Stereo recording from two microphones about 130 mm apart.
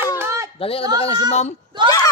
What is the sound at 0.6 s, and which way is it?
Speech, 45° left (ahead or behind).